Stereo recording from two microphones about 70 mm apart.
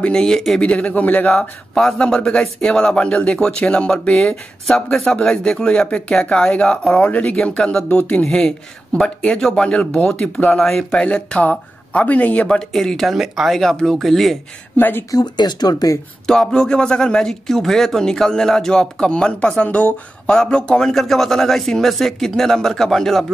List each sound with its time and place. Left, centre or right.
0.0 s speech: centre
0.6 s a man's voice: centre
1.8 s speech: centre
8.0 s a man's voice: left
8.3 s speech: centre
12.4 s a man's voice: centre
14.8 s a man's voice: left
15.0 s speech: left
16.3 s a man's voice: centre